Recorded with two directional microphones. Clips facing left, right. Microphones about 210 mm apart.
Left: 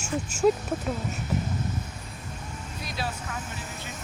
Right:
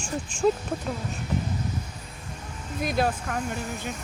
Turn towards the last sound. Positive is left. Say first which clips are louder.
# right 8 dB
turn(degrees=-50)  # may be behind; listen again after turning